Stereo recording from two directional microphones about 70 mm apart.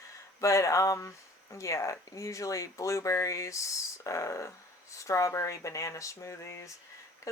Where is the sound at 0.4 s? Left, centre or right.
Left.